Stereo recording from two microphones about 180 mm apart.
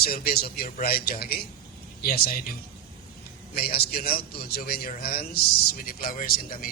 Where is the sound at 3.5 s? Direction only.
60° left (ahead or behind).